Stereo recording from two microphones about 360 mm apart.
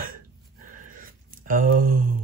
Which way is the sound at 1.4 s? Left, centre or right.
Right.